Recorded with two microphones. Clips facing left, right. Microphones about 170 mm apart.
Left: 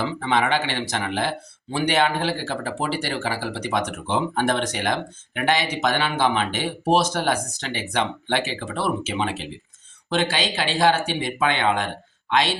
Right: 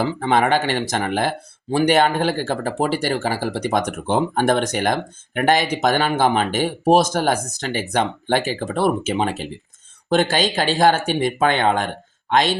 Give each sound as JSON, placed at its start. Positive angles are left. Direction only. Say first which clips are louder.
{"t": 0.0, "sound": "speech", "louder": "right 4 dB", "side_deg": -45}